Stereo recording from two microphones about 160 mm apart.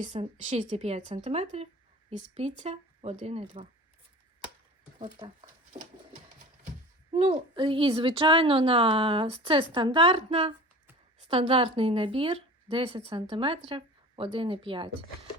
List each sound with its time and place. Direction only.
0.4 s a woman's voice: 45° right (ahead or behind)
7.1 s a woman's voice: 35° right (ahead or behind)